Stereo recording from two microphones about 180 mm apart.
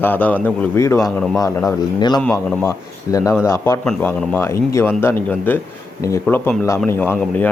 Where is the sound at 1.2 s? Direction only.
5° left (ahead or behind).